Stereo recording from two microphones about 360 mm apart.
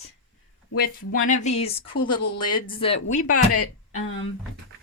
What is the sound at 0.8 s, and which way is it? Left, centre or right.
Speech, left.